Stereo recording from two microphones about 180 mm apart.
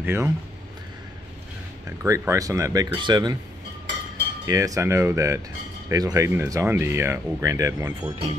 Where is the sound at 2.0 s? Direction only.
15° right (ahead or behind).